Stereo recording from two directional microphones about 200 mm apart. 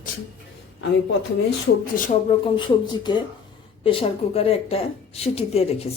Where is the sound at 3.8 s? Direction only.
25° left (ahead or behind).